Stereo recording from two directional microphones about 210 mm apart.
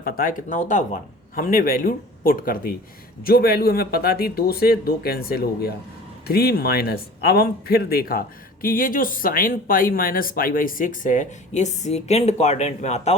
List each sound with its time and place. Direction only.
0.0 s speech: 40° left (ahead or behind)